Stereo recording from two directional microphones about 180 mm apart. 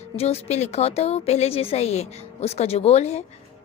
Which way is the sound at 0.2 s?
35° left (ahead or behind).